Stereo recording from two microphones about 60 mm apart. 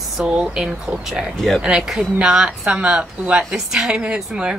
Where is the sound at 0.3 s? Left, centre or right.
Centre.